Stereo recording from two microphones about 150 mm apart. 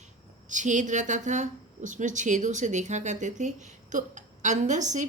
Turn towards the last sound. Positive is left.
turn(degrees=-55)  # may be behind; listen again after turning